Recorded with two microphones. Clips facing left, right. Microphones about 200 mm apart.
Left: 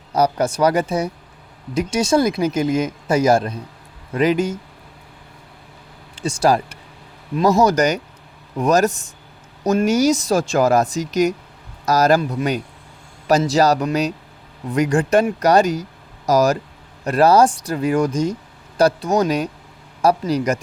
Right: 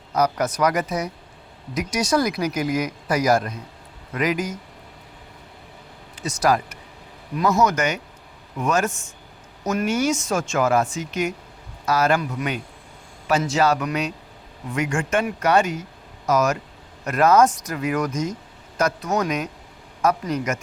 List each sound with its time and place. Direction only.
0.1 s speech: 30° left (ahead or behind)
6.1 s speech: 30° left (ahead or behind)